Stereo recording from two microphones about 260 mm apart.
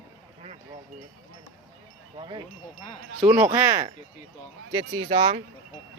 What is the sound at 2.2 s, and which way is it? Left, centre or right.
Speech, centre.